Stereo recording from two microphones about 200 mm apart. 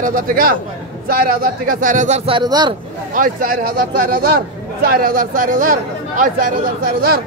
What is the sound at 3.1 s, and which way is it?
Speech, 45° right (ahead or behind).